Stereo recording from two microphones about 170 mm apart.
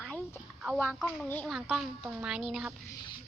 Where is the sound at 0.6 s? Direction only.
5° right (ahead or behind).